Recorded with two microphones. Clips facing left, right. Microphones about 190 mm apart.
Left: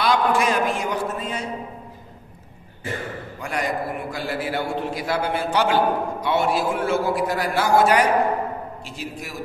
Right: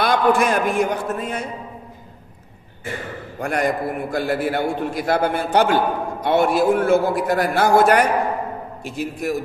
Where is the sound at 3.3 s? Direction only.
55° right (ahead or behind).